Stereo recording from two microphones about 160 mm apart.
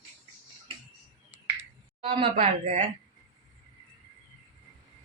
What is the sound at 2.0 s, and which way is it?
Speech, 35° right (ahead or behind).